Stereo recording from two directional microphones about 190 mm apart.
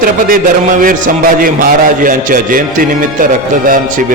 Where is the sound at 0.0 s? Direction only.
45° right (ahead or behind).